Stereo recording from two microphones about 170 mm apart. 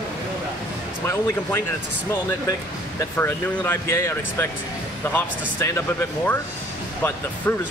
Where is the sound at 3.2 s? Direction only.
15° left (ahead or behind).